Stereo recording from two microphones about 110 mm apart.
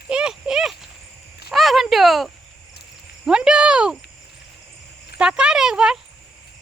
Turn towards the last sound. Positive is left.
turn(degrees=-5)  # may be behind; listen again after turning